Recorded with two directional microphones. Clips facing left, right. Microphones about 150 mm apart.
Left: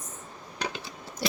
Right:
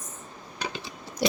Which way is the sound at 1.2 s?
15° right (ahead or behind).